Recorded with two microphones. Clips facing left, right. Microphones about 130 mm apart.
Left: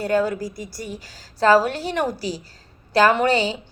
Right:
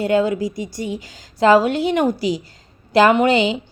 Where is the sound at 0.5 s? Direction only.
90° right.